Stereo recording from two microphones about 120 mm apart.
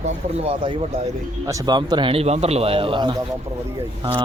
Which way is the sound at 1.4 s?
35° right (ahead or behind).